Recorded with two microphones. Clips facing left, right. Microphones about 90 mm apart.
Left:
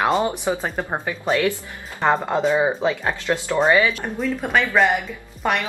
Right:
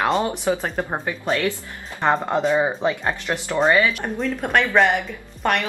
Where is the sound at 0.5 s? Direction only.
15° left (ahead or behind).